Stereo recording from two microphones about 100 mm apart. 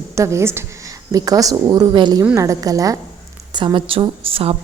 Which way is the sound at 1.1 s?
35° right (ahead or behind).